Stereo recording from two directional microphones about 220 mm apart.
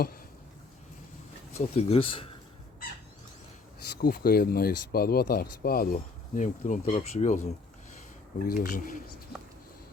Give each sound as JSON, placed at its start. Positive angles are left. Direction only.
{"t": 1.5, "sound": "speech", "side_deg": 25}
{"t": 4.0, "sound": "speech", "side_deg": 45}